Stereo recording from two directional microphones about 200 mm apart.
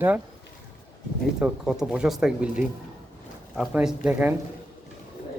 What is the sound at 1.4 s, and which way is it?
Speech, 5° right (ahead or behind).